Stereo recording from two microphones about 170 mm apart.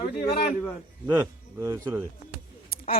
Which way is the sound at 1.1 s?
15° right (ahead or behind).